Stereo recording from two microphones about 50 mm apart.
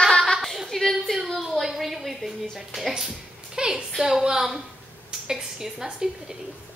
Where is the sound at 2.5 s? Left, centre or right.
Centre.